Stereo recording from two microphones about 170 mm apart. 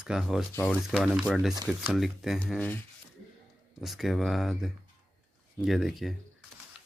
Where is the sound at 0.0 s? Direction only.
5° right (ahead or behind).